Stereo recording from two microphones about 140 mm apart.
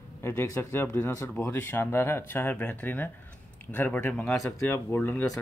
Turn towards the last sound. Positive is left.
turn(degrees=15)  # may be behind; listen again after turning